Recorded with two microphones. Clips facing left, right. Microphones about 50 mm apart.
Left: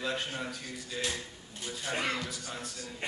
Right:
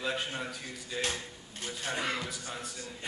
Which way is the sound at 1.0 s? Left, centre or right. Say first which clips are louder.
Right 2 dB; right.